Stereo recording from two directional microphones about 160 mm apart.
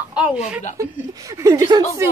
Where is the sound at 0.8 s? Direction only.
20° right (ahead or behind).